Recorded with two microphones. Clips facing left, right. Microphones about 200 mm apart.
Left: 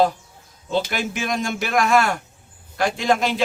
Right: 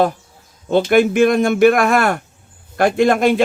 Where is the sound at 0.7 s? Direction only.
55° right (ahead or behind).